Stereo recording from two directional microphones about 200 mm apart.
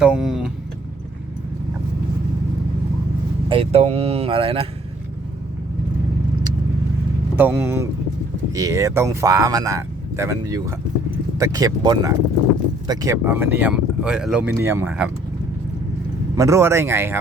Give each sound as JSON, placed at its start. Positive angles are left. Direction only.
{"t": 0.0, "sound": "vehicle", "side_deg": -5}
{"t": 3.5, "sound": "speech", "side_deg": -30}
{"t": 7.3, "sound": "speech", "side_deg": -10}
{"t": 16.3, "sound": "speech", "side_deg": -15}